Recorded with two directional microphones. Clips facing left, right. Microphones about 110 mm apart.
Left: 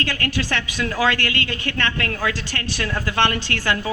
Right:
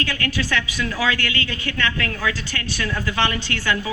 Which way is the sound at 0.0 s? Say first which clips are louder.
Even; 40° left (ahead or behind).